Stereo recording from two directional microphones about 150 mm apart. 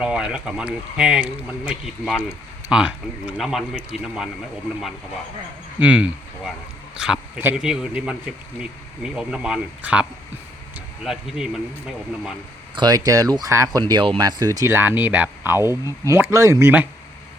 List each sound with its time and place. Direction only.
0.0 s speech: 5° right (ahead or behind)
5.8 s speech: 10° right (ahead or behind)
12.7 s speech: 25° right (ahead or behind)